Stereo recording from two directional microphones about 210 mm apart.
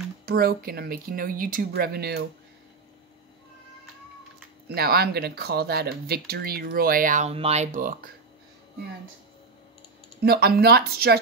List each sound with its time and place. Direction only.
0.2 s speech: 45° right (ahead or behind)
4.7 s speech: 50° right (ahead or behind)
10.2 s speech: 50° right (ahead or behind)